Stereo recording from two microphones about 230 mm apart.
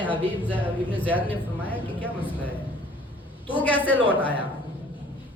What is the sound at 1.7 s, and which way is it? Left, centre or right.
Speech, left.